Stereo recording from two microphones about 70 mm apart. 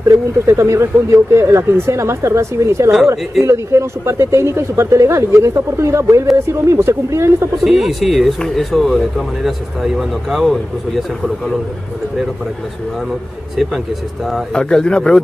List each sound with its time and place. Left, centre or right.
0.1 s speech: right
7.6 s speech: centre
14.5 s speech: centre